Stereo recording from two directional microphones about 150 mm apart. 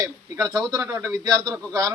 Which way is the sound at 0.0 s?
25° right (ahead or behind).